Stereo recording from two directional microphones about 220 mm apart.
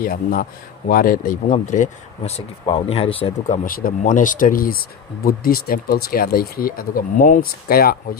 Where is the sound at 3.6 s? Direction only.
40° left (ahead or behind).